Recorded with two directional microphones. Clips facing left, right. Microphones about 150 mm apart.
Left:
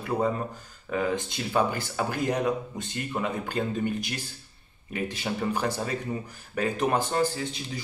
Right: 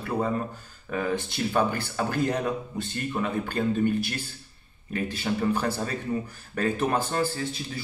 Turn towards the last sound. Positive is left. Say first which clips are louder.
# left 1 dB
turn(degrees=15)  # may be behind; listen again after turning